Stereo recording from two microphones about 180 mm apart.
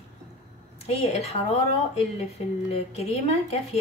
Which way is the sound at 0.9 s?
35° left (ahead or behind).